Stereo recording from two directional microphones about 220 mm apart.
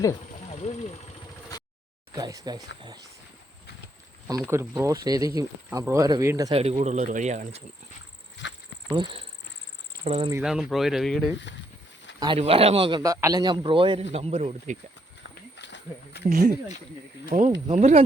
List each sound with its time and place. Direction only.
0.5 s speech: 30° left (ahead or behind)
2.1 s speech: 15° right (ahead or behind)
4.3 s speech: 15° right (ahead or behind)
6.6 s speech: 30° right (ahead or behind)
8.9 s a man's voice: 20° right (ahead or behind)
10.3 s speech: 5° right (ahead or behind)
12.2 s a man's voice: 25° right (ahead or behind)
15.5 s a sound: 50° left (ahead or behind)
17.3 s speech: 30° right (ahead or behind)